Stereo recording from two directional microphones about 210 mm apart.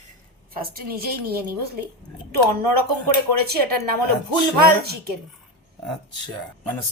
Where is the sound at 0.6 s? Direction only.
45° right (ahead or behind).